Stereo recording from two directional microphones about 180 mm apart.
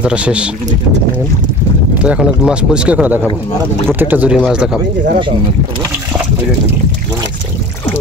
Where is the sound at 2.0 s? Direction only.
5° right (ahead or behind).